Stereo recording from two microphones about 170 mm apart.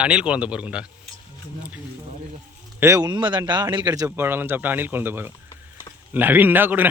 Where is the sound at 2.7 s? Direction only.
20° right (ahead or behind).